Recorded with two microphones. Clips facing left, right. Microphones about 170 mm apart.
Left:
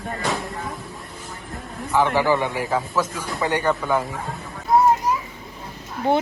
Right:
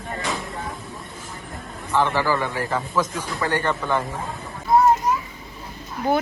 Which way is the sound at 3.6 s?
5° left (ahead or behind).